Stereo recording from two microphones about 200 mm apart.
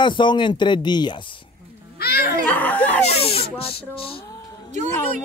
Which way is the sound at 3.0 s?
30° left (ahead or behind).